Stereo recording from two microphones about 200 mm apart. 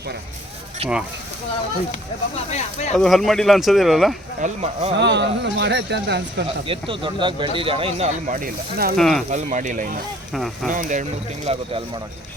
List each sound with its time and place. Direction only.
0.8 s speech: 30° right (ahead or behind)
2.5 s speech: 35° left (ahead or behind)
2.9 s speech: centre (ahead or behind)
4.4 s speech: 40° right (ahead or behind)
4.9 s speech: 60° right (ahead or behind)
6.7 s speech: 25° right (ahead or behind); by 9.0 s 45° right (ahead or behind)
9.0 s speech: centre (ahead or behind)
9.3 s speech: 40° right (ahead or behind)
10.3 s speech: centre (ahead or behind)
10.7 s speech: 40° right (ahead or behind)
11.5 s speech: 30° right (ahead or behind)